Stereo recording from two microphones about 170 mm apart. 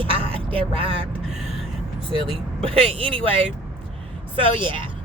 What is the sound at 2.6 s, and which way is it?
Speech, 35° right (ahead or behind).